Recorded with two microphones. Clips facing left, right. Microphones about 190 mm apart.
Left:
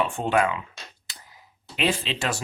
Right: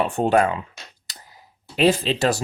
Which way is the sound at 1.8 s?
40° right (ahead or behind).